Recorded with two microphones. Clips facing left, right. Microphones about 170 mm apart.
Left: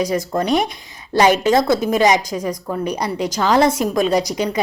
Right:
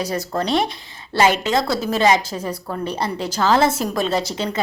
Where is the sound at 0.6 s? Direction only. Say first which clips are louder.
Even; 25° right (ahead or behind).